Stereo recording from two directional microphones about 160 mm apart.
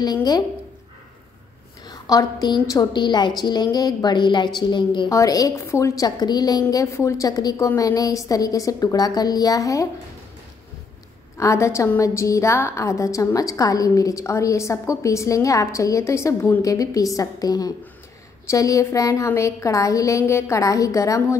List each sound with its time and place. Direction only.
0.0 s a woman's voice: 25° left (ahead or behind)
1.9 s a sound: 20° left (ahead or behind)
2.7 s a woman's voice: 25° left (ahead or behind)
11.3 s a woman's voice: 20° left (ahead or behind)